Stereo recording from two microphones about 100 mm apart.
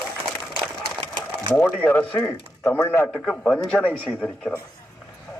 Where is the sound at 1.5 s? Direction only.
15° left (ahead or behind).